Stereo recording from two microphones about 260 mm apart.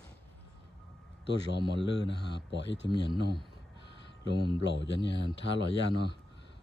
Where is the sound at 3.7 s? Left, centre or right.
Left.